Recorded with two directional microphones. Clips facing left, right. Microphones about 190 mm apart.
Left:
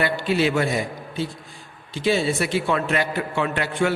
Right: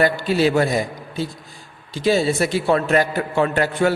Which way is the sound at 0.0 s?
40° right (ahead or behind).